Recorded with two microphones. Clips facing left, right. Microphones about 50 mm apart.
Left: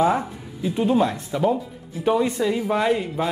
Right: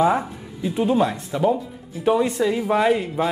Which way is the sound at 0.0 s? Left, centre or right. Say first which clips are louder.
Right 1 dB; centre.